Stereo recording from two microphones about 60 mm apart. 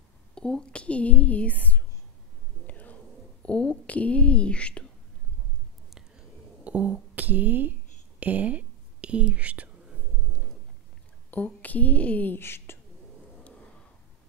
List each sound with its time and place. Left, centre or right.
0.3 s a woman's voice: centre
2.6 s a sound: left
3.4 s speech: left
6.6 s a sound: right
8.2 s whispering: right
11.2 s speech: left
12.4 s a woman's voice: left